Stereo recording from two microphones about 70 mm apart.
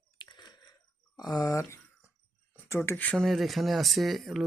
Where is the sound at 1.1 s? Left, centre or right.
Left.